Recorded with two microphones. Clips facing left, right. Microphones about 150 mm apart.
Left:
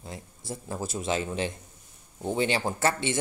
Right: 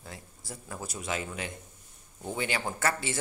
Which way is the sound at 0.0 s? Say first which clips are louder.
Left 5 dB; 20° left (ahead or behind).